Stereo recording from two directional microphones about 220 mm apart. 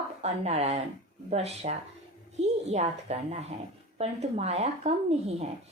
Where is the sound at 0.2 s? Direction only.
30° right (ahead or behind).